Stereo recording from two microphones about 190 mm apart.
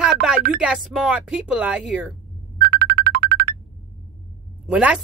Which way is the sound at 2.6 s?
55° right (ahead or behind).